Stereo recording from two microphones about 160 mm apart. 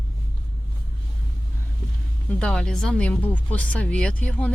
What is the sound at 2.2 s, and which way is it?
Speech, 5° left (ahead or behind).